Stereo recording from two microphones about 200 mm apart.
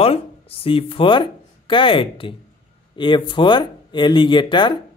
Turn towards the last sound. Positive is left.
turn(degrees=25)  # may be behind; listen again after turning